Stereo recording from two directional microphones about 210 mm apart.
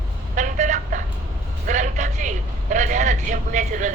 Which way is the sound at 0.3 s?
35° right (ahead or behind).